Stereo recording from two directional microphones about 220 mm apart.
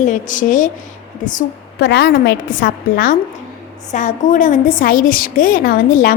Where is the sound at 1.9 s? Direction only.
50° left (ahead or behind).